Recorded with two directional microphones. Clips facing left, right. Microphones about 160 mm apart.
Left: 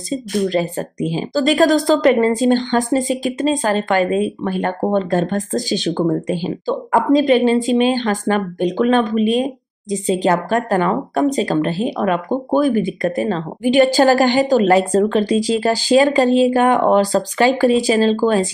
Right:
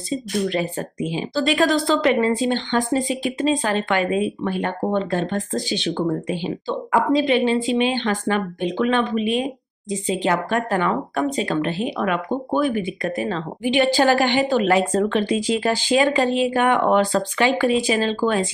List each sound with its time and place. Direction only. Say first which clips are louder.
0.1 s speech: left 4 dB; 35° left (ahead or behind)